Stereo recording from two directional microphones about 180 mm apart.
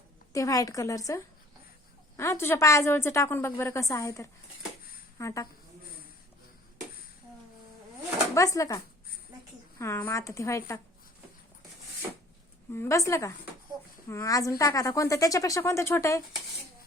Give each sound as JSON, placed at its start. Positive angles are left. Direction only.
{"t": 0.3, "sound": "a woman's voice", "side_deg": 20}
{"t": 8.4, "sound": "a woman's voice", "side_deg": 20}
{"t": 12.7, "sound": "a woman's voice", "side_deg": 15}